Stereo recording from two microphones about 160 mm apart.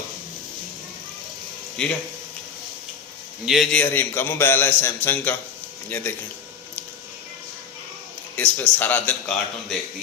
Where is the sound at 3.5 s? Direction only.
Centre (ahead or behind).